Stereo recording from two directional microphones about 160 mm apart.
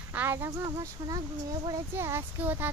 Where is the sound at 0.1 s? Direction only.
15° right (ahead or behind).